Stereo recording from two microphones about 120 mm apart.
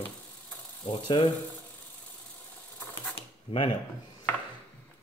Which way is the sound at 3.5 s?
50° left (ahead or behind).